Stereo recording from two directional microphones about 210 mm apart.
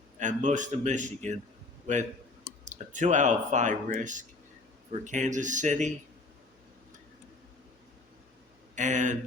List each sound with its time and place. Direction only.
0.2 s speech: 35° right (ahead or behind)
2.6 s speech: 35° right (ahead or behind)
8.7 s speech: 35° right (ahead or behind)